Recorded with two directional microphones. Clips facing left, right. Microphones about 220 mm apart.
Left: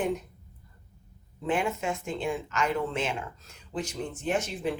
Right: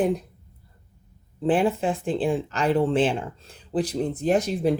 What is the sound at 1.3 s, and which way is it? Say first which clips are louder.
Speech: right 7 dB; 35° right (ahead or behind).